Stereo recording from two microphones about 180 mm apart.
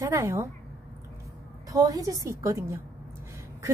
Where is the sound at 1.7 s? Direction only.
20° right (ahead or behind).